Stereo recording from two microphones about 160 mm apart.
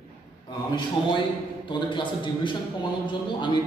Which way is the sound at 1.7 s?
30° left (ahead or behind).